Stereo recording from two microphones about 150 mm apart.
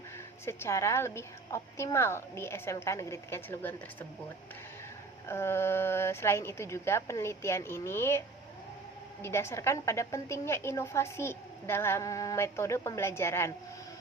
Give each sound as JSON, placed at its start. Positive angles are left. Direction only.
{"t": 0.4, "sound": "a woman's voice", "side_deg": 20}
{"t": 5.3, "sound": "a woman's voice", "side_deg": 15}
{"t": 9.2, "sound": "a woman's voice", "side_deg": 15}